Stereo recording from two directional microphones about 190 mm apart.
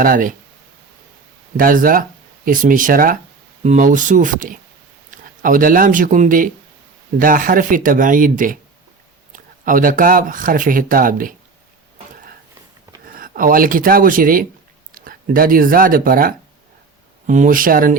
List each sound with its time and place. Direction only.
0.0 s speech: 45° right (ahead or behind)
1.5 s speech: 45° right (ahead or behind)
13.1 s speech: 45° right (ahead or behind)